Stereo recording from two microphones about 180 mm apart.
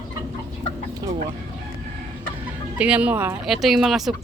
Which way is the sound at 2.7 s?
5° right (ahead or behind).